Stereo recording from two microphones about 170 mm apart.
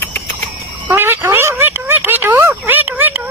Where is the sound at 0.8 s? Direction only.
15° right (ahead or behind).